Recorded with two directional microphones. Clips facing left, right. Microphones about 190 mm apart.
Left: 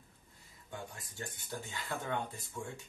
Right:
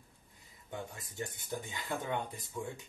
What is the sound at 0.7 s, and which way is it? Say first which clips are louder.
Speech: right 3 dB; 20° right (ahead or behind).